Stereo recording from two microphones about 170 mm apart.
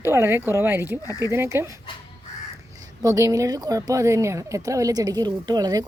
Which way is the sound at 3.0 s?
20° right (ahead or behind).